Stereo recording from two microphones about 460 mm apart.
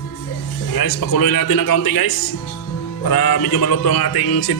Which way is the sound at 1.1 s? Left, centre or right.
Left.